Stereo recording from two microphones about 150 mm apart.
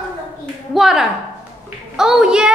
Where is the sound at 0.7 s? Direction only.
5° right (ahead or behind).